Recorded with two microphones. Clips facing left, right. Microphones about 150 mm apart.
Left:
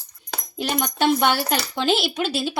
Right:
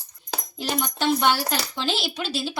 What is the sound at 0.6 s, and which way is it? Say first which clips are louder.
Speech: left 4 dB; 60° left (ahead or behind).